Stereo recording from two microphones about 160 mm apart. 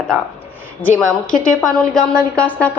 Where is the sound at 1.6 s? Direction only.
5° left (ahead or behind).